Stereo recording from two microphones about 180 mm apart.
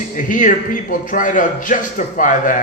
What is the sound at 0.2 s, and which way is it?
Speech, 50° left (ahead or behind).